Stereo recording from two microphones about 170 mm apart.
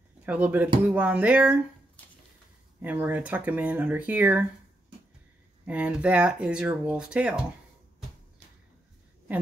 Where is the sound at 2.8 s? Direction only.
10° right (ahead or behind).